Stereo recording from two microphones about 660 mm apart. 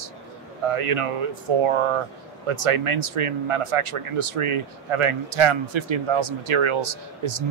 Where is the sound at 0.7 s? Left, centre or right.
Right.